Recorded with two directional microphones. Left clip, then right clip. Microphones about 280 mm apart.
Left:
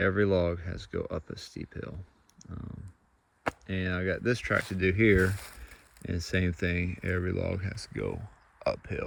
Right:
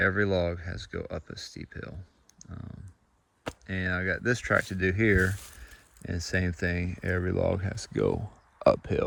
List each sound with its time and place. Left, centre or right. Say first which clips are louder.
0.0 s speech: even; centre
2.4 s typing: left 1 dB; centre
3.4 s speech: even; centre